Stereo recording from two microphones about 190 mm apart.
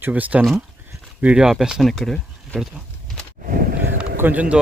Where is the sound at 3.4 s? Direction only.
50° right (ahead or behind).